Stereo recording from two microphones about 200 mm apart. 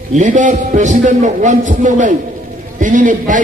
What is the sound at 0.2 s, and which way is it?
A man's voice, 40° right (ahead or behind).